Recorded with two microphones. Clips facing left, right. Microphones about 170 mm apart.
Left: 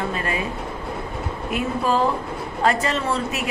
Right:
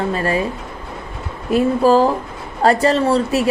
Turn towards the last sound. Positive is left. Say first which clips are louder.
# right 8 dB
turn(degrees=-35)  # may be behind; listen again after turning